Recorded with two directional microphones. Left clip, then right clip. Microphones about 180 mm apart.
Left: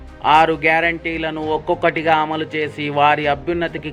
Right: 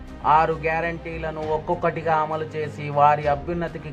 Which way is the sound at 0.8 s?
35° left (ahead or behind).